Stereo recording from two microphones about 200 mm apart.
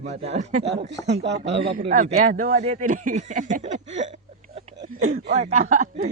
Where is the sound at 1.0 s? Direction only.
60° right (ahead or behind).